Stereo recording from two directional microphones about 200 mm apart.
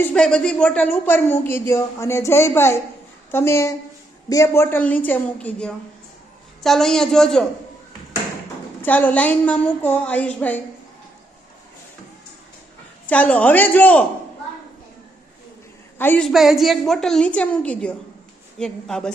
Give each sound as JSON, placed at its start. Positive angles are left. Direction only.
{"t": 0.0, "sound": "a woman's voice", "side_deg": 5}
{"t": 8.8, "sound": "speech", "side_deg": 10}
{"t": 13.1, "sound": "speech", "side_deg": 5}
{"t": 16.0, "sound": "a woman's voice", "side_deg": 10}